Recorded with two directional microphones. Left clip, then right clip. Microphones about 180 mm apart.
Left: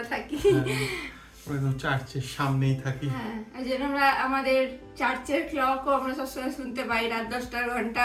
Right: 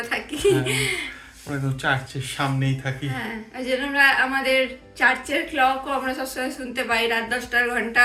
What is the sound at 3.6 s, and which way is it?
Speech, 30° left (ahead or behind).